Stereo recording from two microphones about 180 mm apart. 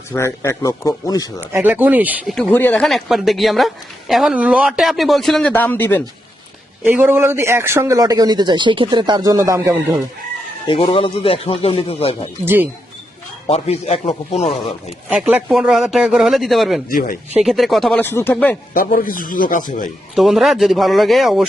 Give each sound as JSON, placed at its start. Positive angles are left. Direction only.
{"t": 0.1, "sound": "speech", "side_deg": 15}
{"t": 1.4, "sound": "speech", "side_deg": -10}
{"t": 2.3, "sound": "a man's voice", "side_deg": 5}
{"t": 6.8, "sound": "a man's voice", "side_deg": -10}
{"t": 10.7, "sound": "speech", "side_deg": 30}
{"t": 13.5, "sound": "speech", "side_deg": 35}
{"t": 15.1, "sound": "a man's voice", "side_deg": -5}
{"t": 16.9, "sound": "a man's voice", "side_deg": 50}
{"t": 17.4, "sound": "a man's voice", "side_deg": 0}
{"t": 18.0, "sound": "speech", "side_deg": 15}
{"t": 18.7, "sound": "a man's voice", "side_deg": 50}
{"t": 20.1, "sound": "a man's voice", "side_deg": 0}